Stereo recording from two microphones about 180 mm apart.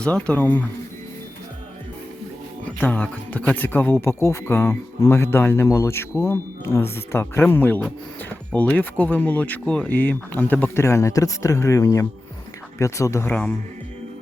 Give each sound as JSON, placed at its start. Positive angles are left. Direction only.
{"t": 0.0, "sound": "speech", "side_deg": 5}
{"t": 2.6, "sound": "speech", "side_deg": 10}